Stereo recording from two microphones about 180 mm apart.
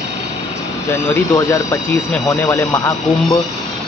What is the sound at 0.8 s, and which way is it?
Speech, 15° left (ahead or behind).